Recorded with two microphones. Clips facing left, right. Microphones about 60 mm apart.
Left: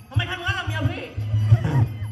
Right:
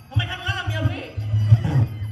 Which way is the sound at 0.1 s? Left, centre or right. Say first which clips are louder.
Left 1 dB; left.